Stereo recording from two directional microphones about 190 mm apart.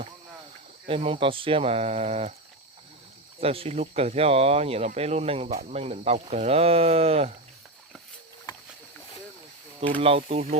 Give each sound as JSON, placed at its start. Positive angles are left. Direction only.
{"t": 0.9, "sound": "speech", "side_deg": -30}
{"t": 3.4, "sound": "speech", "side_deg": -30}
{"t": 9.8, "sound": "speech", "side_deg": -30}